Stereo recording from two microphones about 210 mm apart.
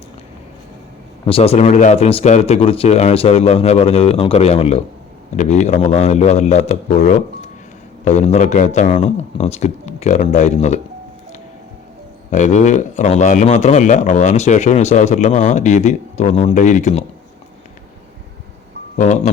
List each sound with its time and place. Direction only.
1.2 s speech: 25° left (ahead or behind)
12.3 s speech: 35° left (ahead or behind)
18.9 s speech: 35° left (ahead or behind)